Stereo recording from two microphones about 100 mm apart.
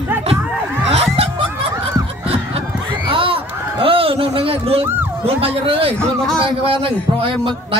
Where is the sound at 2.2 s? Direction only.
75° right (ahead or behind).